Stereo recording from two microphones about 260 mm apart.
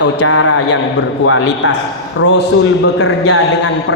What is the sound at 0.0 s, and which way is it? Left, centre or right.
A man's voice, left.